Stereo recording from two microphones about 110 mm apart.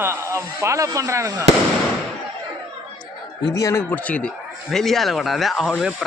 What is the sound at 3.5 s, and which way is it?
Speech, 30° left (ahead or behind).